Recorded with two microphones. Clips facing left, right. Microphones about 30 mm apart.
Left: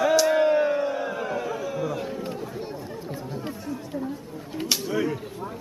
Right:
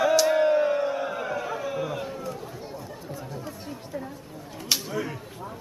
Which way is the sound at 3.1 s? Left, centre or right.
Left.